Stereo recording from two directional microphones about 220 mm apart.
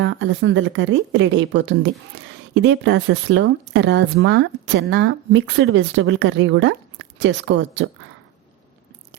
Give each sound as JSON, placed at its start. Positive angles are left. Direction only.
{"t": 0.0, "sound": "speech", "side_deg": -55}